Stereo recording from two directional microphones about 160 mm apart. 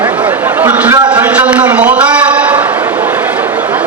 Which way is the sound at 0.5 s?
10° right (ahead or behind).